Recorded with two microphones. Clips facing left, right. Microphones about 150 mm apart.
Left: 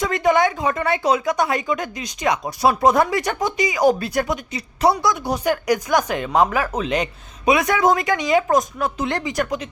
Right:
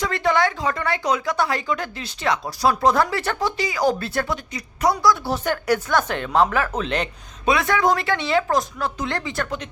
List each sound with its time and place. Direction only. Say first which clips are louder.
0.0 s speech: left 3 dB; 20° left (ahead or behind)
4.5 s speech: left 3 dB; 30° left (ahead or behind)
5.2 s speech: left 3 dB; 10° left (ahead or behind)